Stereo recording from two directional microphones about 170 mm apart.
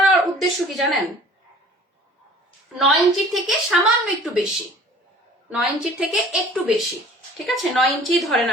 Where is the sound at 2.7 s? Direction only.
Centre (ahead or behind).